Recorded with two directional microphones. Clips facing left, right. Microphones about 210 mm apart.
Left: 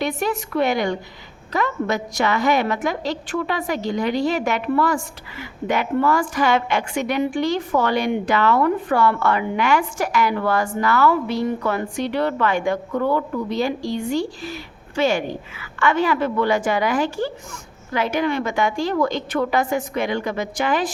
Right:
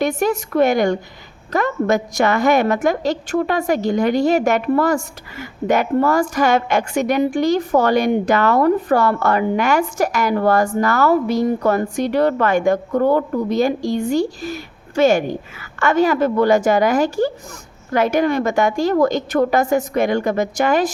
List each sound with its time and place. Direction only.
0.0 s a woman's voice: 45° right (ahead or behind)